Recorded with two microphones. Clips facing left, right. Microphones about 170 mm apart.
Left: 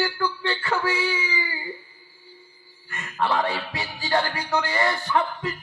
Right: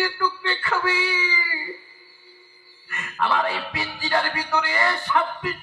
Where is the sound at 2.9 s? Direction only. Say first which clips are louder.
Even; 30° left (ahead or behind).